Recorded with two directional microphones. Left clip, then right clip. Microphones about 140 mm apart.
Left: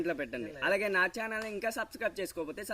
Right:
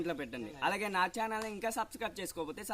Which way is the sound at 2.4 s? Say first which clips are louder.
Left 2 dB; 10° right (ahead or behind).